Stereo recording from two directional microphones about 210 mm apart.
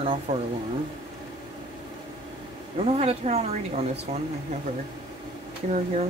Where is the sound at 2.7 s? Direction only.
30° right (ahead or behind).